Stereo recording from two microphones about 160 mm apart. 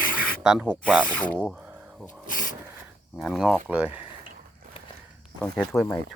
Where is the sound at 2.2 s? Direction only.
55° left (ahead or behind).